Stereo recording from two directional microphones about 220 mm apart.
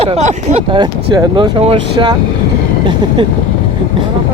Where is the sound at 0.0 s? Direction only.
30° right (ahead or behind).